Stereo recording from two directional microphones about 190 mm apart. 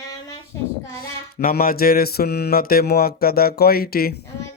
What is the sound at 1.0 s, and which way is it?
Mantra, 50° left (ahead or behind).